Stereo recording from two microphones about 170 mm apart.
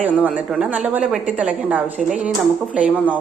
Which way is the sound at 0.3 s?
5° right (ahead or behind).